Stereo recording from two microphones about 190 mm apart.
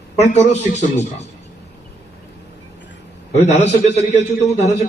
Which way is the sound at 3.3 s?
35° left (ahead or behind).